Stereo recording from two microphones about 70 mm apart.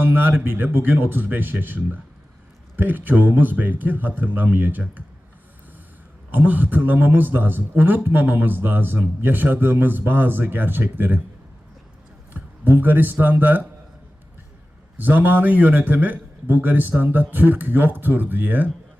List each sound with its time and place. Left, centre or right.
0.0 s a man's voice: right
6.3 s a man's voice: right
12.3 s speech: right
14.9 s a man's voice: right